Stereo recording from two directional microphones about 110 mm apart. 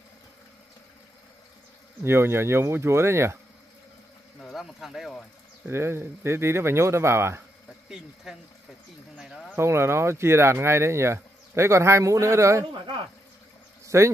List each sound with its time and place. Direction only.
2.0 s speech: 20° right (ahead or behind)
4.4 s speech: centre (ahead or behind)
5.7 s speech: 25° right (ahead or behind)
8.3 s speech: 5° right (ahead or behind)
9.1 s a sound: centre (ahead or behind)
9.6 s speech: 25° right (ahead or behind)
13.8 s speech: 25° right (ahead or behind)